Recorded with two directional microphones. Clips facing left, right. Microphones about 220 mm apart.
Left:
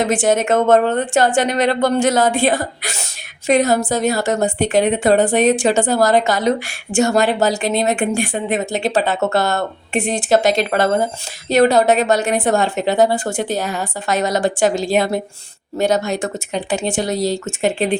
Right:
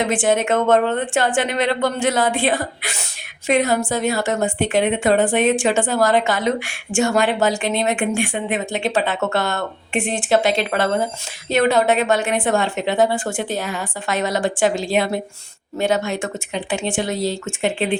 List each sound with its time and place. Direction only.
0.0 s a woman's voice: 40° left (ahead or behind)